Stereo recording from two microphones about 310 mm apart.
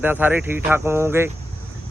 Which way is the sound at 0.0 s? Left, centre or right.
Centre.